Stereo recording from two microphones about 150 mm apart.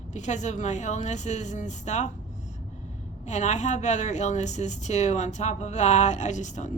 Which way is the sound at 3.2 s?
50° left (ahead or behind).